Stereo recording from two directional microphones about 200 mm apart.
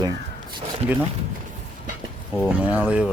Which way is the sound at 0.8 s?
30° right (ahead or behind).